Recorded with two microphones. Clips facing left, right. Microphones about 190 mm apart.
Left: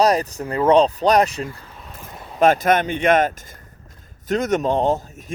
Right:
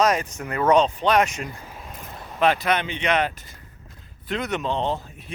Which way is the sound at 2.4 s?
45° left (ahead or behind).